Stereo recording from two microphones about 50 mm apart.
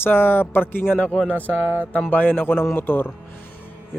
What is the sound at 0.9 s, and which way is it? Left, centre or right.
Speech, left.